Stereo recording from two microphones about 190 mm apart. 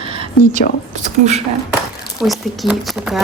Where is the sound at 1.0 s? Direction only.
35° right (ahead or behind).